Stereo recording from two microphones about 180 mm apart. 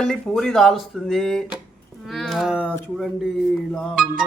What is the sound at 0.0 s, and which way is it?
Speech, 5° left (ahead or behind).